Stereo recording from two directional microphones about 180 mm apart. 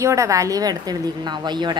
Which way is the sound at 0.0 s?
15° right (ahead or behind).